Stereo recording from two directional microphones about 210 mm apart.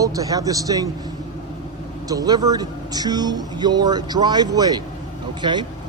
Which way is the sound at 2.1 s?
15° right (ahead or behind).